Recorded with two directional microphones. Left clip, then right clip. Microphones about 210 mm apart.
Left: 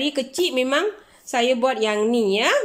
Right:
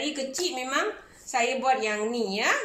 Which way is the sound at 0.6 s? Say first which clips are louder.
Left 7 dB; 45° left (ahead or behind).